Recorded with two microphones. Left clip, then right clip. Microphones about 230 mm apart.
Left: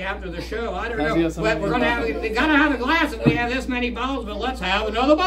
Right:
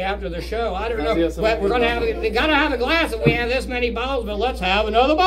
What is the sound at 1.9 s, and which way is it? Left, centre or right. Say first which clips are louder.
Speech: right 1 dB; centre.